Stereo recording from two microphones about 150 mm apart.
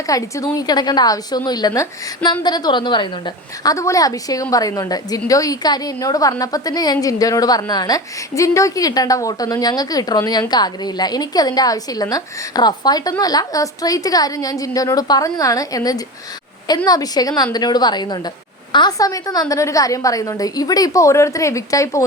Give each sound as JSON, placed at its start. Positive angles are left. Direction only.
{"t": 0.1, "sound": "a woman's voice", "side_deg": 20}